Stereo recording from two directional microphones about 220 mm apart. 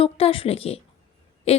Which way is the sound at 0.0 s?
25° left (ahead or behind).